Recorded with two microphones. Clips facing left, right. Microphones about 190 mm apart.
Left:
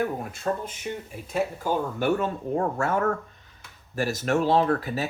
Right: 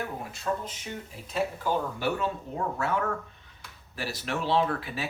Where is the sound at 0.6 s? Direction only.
50° left (ahead or behind).